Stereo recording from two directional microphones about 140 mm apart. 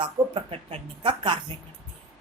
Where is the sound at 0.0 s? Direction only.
45° right (ahead or behind).